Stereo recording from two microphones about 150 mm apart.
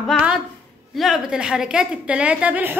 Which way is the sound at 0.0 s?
Centre (ahead or behind).